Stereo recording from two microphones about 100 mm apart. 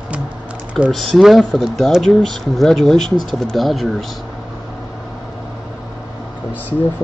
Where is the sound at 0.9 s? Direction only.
5° left (ahead or behind).